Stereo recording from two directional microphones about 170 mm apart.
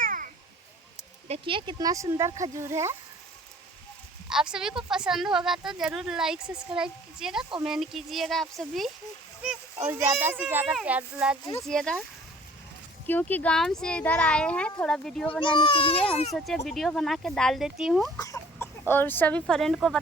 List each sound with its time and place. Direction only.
0.0 s a sound: 55° right (ahead or behind)
1.3 s speech: 30° right (ahead or behind)
4.3 s a woman's voice: 5° right (ahead or behind)
9.8 s a child's voice: 15° right (ahead or behind); by 12.0 s 5° left (ahead or behind)
13.1 s a child's voice: 10° left (ahead or behind)
15.3 s a child's voice: 30° left (ahead or behind)
16.3 s a woman's voice: centre (ahead or behind)
18.2 s speech: 15° left (ahead or behind)